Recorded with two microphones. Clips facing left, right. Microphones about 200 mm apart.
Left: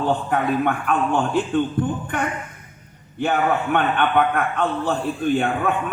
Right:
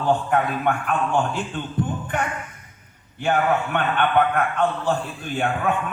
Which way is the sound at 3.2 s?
55° left (ahead or behind).